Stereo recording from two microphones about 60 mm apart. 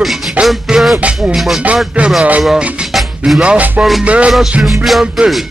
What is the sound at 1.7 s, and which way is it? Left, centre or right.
Music, centre.